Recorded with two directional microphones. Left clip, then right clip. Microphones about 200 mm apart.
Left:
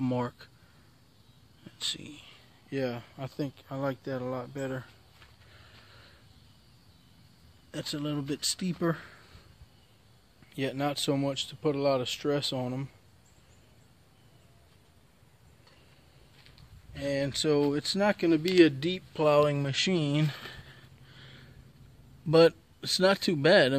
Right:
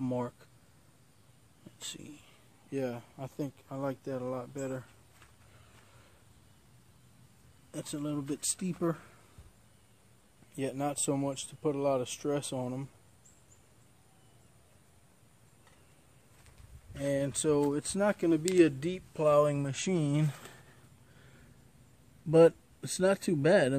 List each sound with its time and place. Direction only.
0.0 s speech: 5° left (ahead or behind)
1.8 s speech: centre (ahead or behind)
7.7 s speech: 5° right (ahead or behind)
10.5 s speech: centre (ahead or behind)
17.0 s speech: 10° right (ahead or behind)
22.3 s speech: 5° left (ahead or behind)